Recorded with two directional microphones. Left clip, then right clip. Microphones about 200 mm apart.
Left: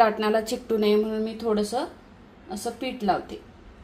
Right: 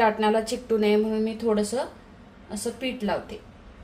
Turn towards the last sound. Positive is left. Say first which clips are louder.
# left 3 dB
turn(degrees=25)  # may be behind; listen again after turning